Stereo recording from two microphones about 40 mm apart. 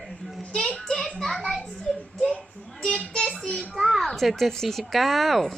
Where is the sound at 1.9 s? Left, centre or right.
Centre.